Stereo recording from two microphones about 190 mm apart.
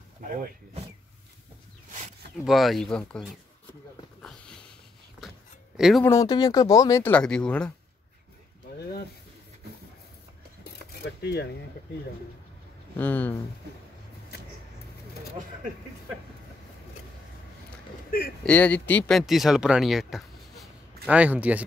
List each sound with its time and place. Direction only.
2.4 s speech: centre (ahead or behind)
5.8 s speech: 5° right (ahead or behind)
6.0 s speech: 20° left (ahead or behind)
8.6 s a sound: 55° left (ahead or behind)
10.6 s keys jangling: 55° left (ahead or behind)
12.9 s speech: 10° left (ahead or behind)
18.4 s speech: 5° left (ahead or behind)